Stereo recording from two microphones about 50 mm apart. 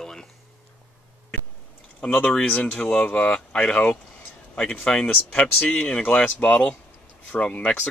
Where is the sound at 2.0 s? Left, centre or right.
Left.